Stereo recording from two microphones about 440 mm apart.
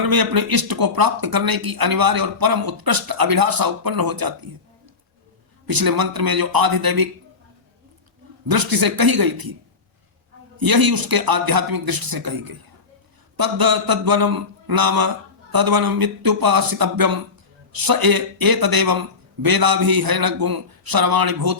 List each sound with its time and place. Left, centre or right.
0.0 s speech: right
5.6 s speech: right
8.4 s speech: right
10.6 s speech: right